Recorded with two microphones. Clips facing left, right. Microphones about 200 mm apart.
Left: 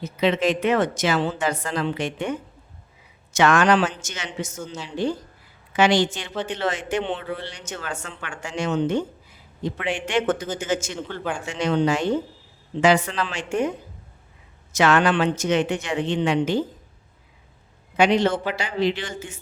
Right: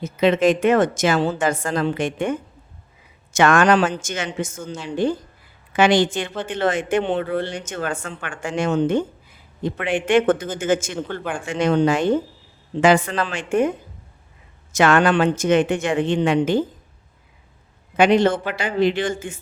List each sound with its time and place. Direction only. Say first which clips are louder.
0.0 s speech: right 4 dB; 50° right (ahead or behind)
17.9 s speech: right 3 dB; 50° right (ahead or behind)